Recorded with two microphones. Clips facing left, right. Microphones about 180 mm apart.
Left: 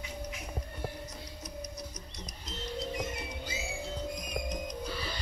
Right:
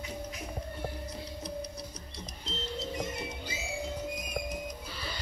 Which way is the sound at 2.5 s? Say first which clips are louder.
Right 4 dB; 30° right (ahead or behind).